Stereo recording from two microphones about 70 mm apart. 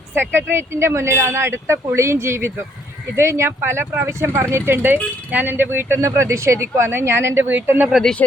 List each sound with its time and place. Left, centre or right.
0.1 s speech: right
6.0 s speech: right